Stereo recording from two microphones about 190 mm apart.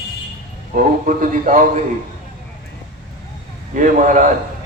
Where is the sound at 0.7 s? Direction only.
45° right (ahead or behind).